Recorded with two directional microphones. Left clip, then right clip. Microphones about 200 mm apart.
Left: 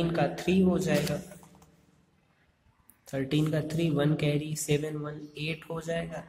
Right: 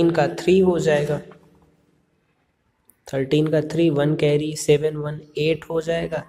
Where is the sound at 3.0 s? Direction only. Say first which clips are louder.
Right 10 dB; 15° right (ahead or behind).